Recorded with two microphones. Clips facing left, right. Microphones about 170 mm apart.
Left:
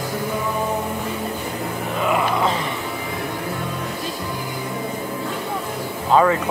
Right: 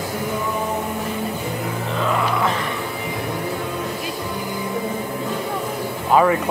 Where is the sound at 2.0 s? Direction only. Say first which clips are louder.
Left 2 dB; 15° left (ahead or behind).